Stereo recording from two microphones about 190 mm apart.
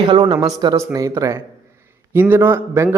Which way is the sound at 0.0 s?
25° right (ahead or behind).